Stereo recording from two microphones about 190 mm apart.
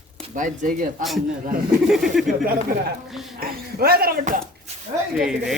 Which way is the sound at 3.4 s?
55° right (ahead or behind).